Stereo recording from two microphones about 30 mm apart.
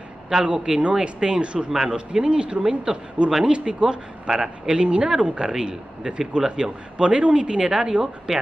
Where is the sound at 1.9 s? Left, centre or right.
Right.